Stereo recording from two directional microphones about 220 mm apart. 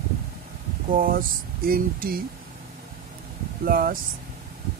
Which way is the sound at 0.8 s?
40° right (ahead or behind).